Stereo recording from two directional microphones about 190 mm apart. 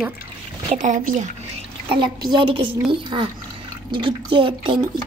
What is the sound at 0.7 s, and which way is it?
Speech, 40° right (ahead or behind).